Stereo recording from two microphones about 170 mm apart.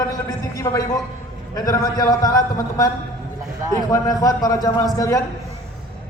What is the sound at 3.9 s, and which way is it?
Speech, 20° left (ahead or behind).